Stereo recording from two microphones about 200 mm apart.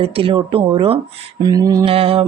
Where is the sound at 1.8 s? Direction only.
30° right (ahead or behind).